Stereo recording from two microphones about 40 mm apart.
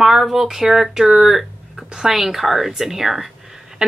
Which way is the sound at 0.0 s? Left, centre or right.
Centre.